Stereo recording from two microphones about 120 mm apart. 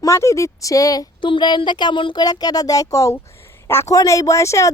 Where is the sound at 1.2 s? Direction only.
45° left (ahead or behind).